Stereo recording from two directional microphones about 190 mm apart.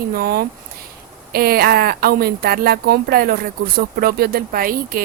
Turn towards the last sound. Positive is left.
turn(degrees=-50)  # may be behind; listen again after turning